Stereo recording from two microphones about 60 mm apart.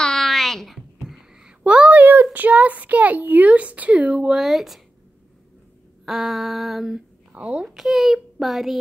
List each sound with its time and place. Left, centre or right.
0.0 s a sound: centre
1.6 s a sound: right
2.3 s speech: right; by 4.8 s centre
6.0 s a child's voice: centre
7.3 s speech: centre
7.7 s a child's voice: centre